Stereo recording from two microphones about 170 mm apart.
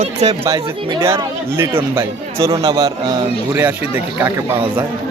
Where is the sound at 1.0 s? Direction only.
15° right (ahead or behind).